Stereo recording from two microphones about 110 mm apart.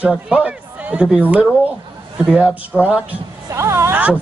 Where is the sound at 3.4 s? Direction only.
25° right (ahead or behind).